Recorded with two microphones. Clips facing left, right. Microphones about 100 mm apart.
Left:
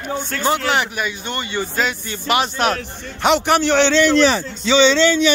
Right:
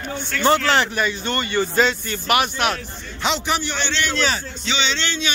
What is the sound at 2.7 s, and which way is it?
A man's voice, 60° left (ahead or behind).